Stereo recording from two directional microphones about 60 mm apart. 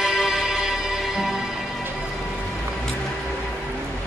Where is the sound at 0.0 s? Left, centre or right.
Centre.